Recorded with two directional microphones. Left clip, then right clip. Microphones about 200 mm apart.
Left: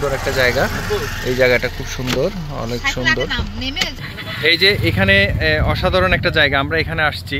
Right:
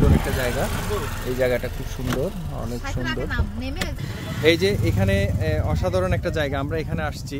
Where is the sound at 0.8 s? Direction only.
35° right (ahead or behind).